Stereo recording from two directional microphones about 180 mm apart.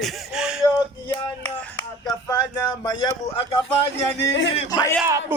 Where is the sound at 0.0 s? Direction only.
5° right (ahead or behind).